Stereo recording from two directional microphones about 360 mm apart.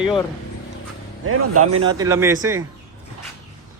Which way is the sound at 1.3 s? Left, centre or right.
Right.